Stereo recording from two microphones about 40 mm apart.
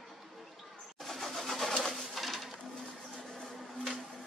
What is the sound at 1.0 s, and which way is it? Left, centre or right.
Pigeon, centre.